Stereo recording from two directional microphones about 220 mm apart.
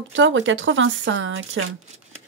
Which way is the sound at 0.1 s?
60° right (ahead or behind).